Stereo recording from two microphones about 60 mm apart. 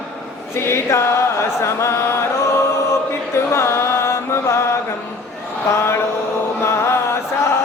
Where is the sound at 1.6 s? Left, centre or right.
Left.